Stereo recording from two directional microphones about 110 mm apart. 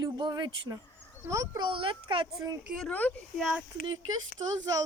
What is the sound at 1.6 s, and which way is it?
Speech, 50° right (ahead or behind).